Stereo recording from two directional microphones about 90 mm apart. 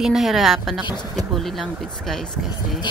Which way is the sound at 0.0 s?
5° right (ahead or behind).